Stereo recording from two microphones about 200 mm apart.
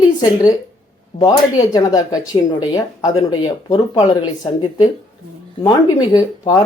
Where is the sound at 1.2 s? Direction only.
20° left (ahead or behind).